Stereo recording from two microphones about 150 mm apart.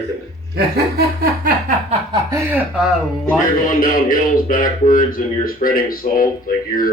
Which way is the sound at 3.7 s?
65° left (ahead or behind).